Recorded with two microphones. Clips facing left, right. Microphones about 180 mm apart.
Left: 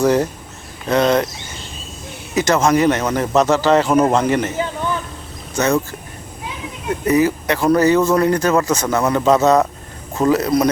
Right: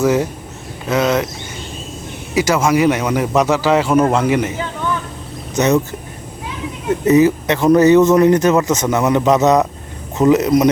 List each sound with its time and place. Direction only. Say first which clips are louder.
0.0 s speech: even; 5° right (ahead or behind)
2.3 s speech: even; 10° right (ahead or behind)
5.5 s speech: right 3 dB; 20° right (ahead or behind)
7.0 s speech: right 4 dB; 20° right (ahead or behind)